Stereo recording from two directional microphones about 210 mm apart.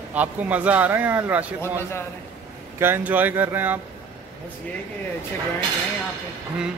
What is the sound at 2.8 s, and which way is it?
A man's voice, 10° right (ahead or behind).